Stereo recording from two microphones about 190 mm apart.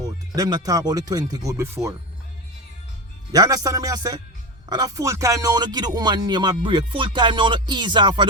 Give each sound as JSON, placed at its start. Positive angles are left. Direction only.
{"t": 0.0, "sound": "speech", "side_deg": -20}
{"t": 3.3, "sound": "speech", "side_deg": -20}